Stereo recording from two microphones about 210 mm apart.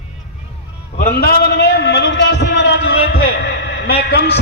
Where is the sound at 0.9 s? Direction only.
40° left (ahead or behind).